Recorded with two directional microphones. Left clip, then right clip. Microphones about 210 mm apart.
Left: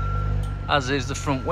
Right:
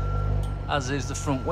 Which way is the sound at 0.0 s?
45° right (ahead or behind).